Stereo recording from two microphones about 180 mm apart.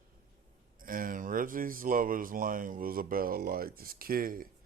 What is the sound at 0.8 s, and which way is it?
Speech, 50° right (ahead or behind).